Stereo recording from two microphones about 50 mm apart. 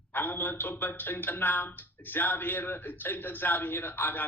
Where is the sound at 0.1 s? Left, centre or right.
Left.